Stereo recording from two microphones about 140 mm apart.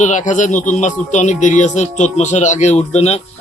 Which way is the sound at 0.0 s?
60° left (ahead or behind).